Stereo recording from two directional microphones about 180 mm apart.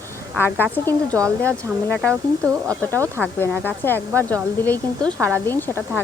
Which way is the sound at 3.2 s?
10° left (ahead or behind).